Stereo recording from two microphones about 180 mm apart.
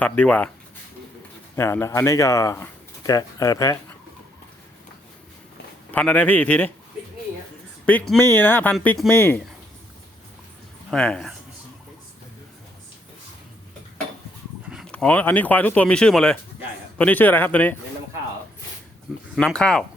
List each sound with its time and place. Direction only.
0.0 s speech: 10° left (ahead or behind)
1.5 s speech: 15° left (ahead or behind)
5.9 s speech: 10° left (ahead or behind)
7.9 s speech: 5° left (ahead or behind)
10.9 s speech: 5° left (ahead or behind)
14.7 s a sound: centre (ahead or behind)
14.9 s speech: 10° left (ahead or behind)
19.4 s speech: 5° left (ahead or behind)